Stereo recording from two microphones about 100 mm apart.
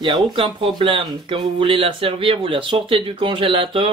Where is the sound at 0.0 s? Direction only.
55° right (ahead or behind).